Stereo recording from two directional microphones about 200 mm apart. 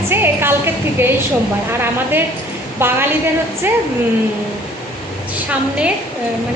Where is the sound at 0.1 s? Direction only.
10° right (ahead or behind).